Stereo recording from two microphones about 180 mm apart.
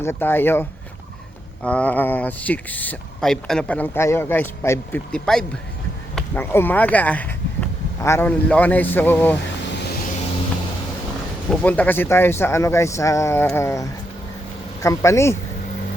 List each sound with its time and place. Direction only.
0.0 s speech: 15° left (ahead or behind)
11.6 s speech: 10° left (ahead or behind)